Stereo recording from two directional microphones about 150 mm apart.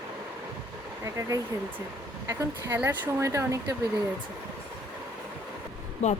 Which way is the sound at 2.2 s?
15° right (ahead or behind).